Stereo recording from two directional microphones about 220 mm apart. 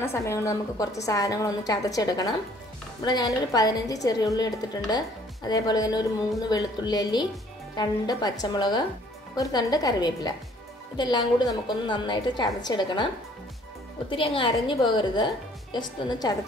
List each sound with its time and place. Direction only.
0.0 s a woman's voice: 10° left (ahead or behind)